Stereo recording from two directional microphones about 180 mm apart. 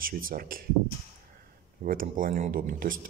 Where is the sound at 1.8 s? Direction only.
50° right (ahead or behind).